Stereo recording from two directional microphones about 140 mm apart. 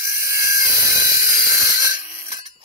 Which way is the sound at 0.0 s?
20° right (ahead or behind).